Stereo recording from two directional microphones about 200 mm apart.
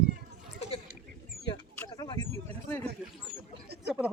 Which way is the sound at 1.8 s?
20° left (ahead or behind).